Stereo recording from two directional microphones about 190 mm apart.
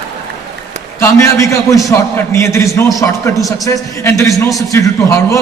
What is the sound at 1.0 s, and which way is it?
A man's voice, 15° left (ahead or behind).